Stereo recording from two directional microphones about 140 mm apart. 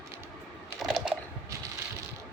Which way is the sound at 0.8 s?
Centre (ahead or behind).